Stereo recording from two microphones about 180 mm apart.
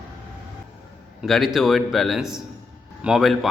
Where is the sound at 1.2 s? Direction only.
Centre (ahead or behind).